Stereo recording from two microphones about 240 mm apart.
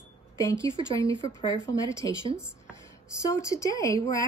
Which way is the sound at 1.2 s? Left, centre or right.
Centre.